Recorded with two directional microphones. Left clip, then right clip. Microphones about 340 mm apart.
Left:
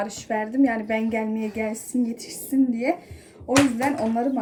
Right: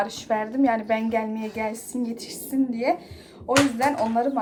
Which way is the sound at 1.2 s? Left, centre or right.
Centre.